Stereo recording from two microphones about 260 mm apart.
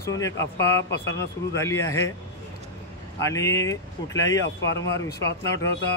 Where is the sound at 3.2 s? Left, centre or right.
Centre.